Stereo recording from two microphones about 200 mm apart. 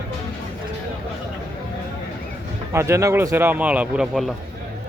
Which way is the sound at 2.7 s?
15° right (ahead or behind).